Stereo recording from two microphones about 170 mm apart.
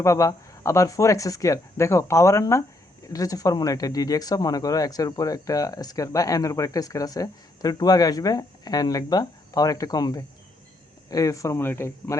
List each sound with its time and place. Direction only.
0.0 s speech: 20° left (ahead or behind)